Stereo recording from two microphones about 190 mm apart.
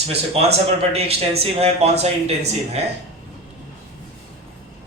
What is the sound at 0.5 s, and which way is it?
Speech, 30° right (ahead or behind).